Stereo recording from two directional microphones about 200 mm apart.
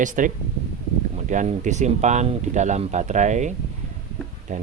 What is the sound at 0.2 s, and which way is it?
Speech, 40° right (ahead or behind).